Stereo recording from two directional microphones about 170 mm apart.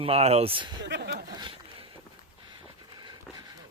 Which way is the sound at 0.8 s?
85° right.